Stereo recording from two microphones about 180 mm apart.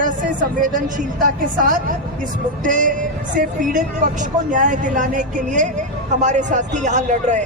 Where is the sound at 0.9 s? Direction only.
50° right (ahead or behind).